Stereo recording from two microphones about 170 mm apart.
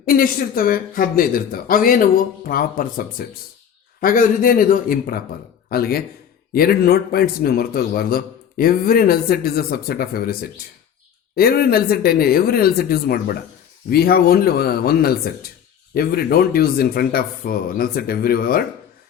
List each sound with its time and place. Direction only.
0.0 s speech: 60° left (ahead or behind)
11.3 s speech: 65° left (ahead or behind)